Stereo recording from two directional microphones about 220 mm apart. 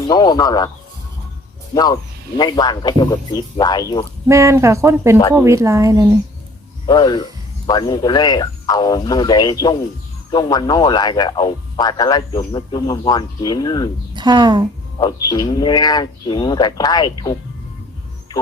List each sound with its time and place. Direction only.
0.1 s speech: 15° left (ahead or behind)
1.7 s speech: 20° left (ahead or behind)
4.3 s speech: 15° right (ahead or behind)
6.8 s speech: 20° left (ahead or behind)
14.1 s a woman's voice: 20° right (ahead or behind)
14.9 s speech: 20° left (ahead or behind)